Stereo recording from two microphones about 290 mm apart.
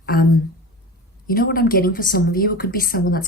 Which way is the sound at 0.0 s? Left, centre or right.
Left.